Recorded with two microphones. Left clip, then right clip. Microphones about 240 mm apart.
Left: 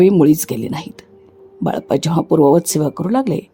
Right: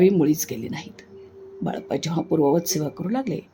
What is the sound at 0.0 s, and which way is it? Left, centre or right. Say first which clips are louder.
Speech: left 7 dB; left.